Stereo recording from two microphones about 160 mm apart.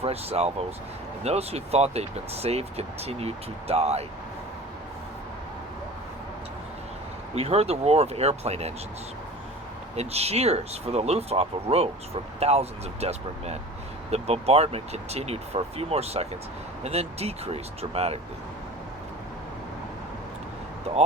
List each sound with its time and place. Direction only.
0.0 s speech: 40° right (ahead or behind)
7.3 s speech: 40° right (ahead or behind)
9.9 s speech: 40° right (ahead or behind)